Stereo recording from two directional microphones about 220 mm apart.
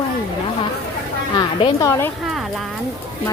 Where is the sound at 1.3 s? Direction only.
20° left (ahead or behind).